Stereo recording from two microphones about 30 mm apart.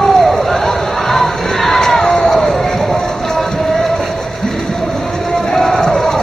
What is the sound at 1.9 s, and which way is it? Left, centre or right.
Run, centre.